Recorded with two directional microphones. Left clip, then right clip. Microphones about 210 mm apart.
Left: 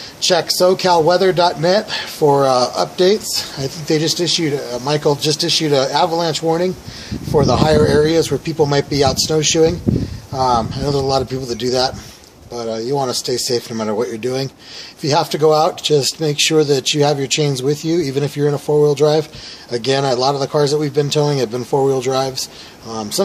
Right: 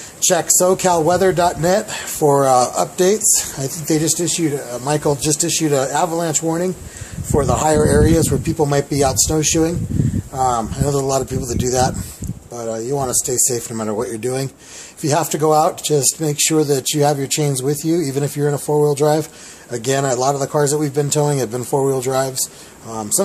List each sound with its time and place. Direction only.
0.3 s speech: 15° right (ahead or behind)